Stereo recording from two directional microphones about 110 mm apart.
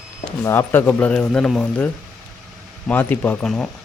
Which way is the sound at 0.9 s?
10° left (ahead or behind).